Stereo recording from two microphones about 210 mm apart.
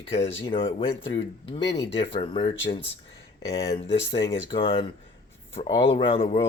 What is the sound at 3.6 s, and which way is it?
Speech, 30° left (ahead or behind).